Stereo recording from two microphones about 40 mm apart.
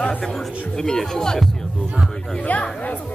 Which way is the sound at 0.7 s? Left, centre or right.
Centre.